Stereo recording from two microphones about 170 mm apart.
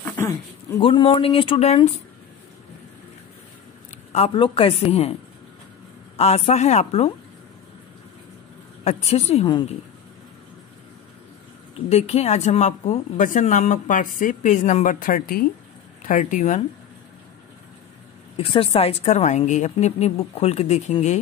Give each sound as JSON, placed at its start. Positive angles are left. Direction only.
{"t": 0.0, "sound": "a sound", "side_deg": 15}
{"t": 0.7, "sound": "a woman's voice", "side_deg": 30}
{"t": 4.1, "sound": "a woman's voice", "side_deg": 35}
{"t": 6.1, "sound": "a woman's voice", "side_deg": 40}
{"t": 8.8, "sound": "a woman's voice", "side_deg": 40}
{"t": 11.9, "sound": "a woman's voice", "side_deg": 40}
{"t": 18.4, "sound": "a woman's voice", "side_deg": 35}